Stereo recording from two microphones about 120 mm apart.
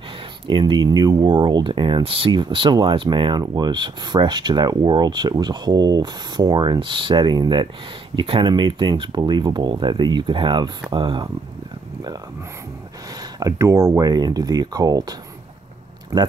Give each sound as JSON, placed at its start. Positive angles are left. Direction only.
{"t": 0.5, "sound": "speech", "side_deg": -45}
{"t": 13.4, "sound": "speech", "side_deg": -25}